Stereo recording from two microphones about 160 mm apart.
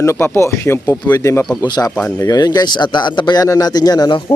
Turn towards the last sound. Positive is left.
turn(degrees=25)  # may be behind; listen again after turning